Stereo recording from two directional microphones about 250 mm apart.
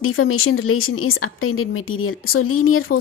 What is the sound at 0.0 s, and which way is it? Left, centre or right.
Speech, left.